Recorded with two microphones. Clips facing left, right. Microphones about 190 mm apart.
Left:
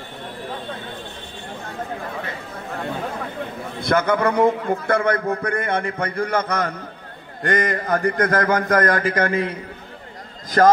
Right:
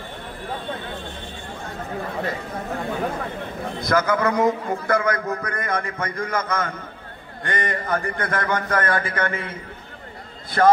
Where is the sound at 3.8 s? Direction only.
30° left (ahead or behind).